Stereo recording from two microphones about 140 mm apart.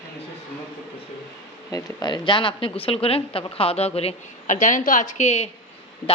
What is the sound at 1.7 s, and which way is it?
A woman's voice, 30° left (ahead or behind).